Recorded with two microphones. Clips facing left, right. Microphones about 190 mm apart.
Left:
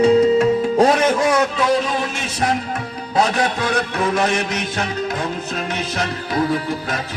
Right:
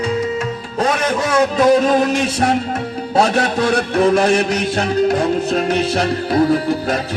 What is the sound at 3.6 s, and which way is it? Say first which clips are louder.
Music: right 6 dB; 35° right (ahead or behind).